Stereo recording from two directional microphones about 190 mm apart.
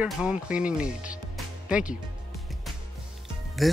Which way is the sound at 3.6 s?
Centre (ahead or behind).